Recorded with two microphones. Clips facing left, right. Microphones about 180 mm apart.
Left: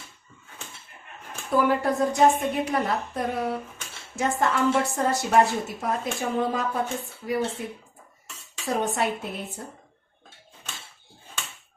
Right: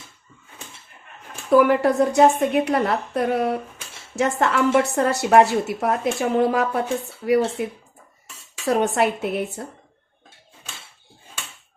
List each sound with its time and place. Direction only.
1.5 s a woman's voice: 70° right (ahead or behind)